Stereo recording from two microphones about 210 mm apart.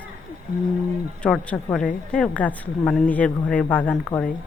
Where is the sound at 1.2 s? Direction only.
Centre (ahead or behind).